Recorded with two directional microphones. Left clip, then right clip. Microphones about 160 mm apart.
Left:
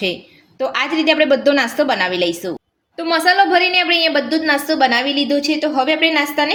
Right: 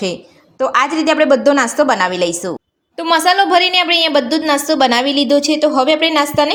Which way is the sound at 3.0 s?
70° right (ahead or behind).